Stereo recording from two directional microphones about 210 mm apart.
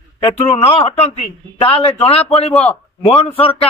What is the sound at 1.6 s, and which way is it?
A man's voice, 25° left (ahead or behind).